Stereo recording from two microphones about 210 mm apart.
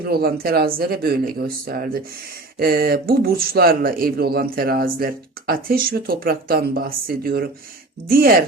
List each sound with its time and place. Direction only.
0.0 s speech: 45° right (ahead or behind)